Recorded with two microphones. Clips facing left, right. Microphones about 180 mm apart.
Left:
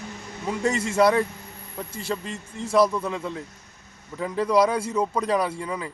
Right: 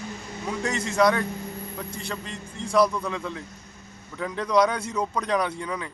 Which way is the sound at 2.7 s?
25° left (ahead or behind).